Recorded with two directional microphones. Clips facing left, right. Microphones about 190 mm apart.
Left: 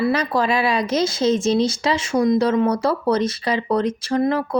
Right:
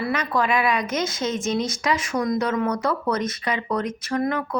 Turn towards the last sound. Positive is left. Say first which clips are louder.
# left 5 dB
turn(degrees=30)  # may be behind; listen again after turning